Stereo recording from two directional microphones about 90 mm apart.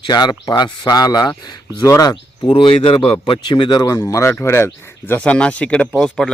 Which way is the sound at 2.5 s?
70° left (ahead or behind).